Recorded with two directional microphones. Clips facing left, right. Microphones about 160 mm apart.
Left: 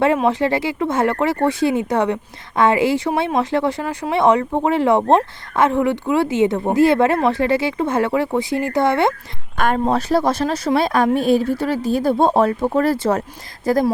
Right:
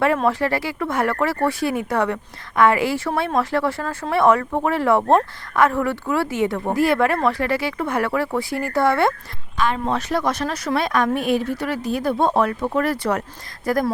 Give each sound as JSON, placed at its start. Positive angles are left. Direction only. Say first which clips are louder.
{"t": 0.3, "sound": "speech", "louder": "left 3 dB", "side_deg": 20}
{"t": 9.6, "sound": "speech", "louder": "left 4 dB", "side_deg": 45}